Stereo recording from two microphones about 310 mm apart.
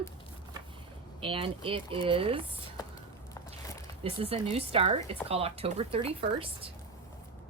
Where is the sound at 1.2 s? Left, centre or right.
Centre.